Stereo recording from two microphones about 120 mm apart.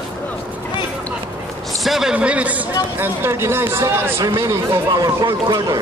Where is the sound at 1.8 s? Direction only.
5° right (ahead or behind); by 5.7 s 35° right (ahead or behind).